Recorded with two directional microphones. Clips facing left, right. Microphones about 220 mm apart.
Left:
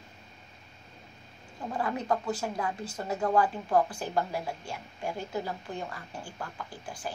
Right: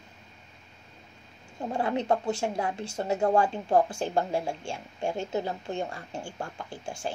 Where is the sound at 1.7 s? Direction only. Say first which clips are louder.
Right 3 dB; 25° right (ahead or behind).